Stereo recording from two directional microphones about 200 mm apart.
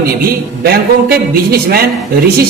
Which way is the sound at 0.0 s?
50° right (ahead or behind).